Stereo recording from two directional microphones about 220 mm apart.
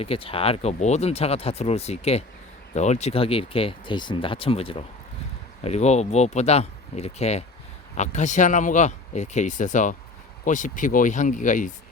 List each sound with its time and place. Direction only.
0.0 s speech: 25° left (ahead or behind)